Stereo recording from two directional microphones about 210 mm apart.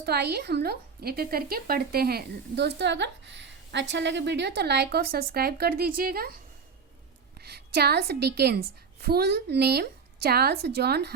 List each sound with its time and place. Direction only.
0.0 s speech: 50° right (ahead or behind)
7.3 s a woman's voice: 50° right (ahead or behind)